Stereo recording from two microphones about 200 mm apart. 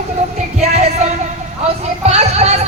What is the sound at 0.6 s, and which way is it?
Music, 35° right (ahead or behind).